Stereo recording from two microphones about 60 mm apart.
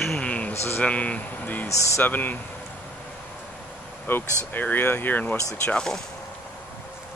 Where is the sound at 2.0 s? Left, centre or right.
Left.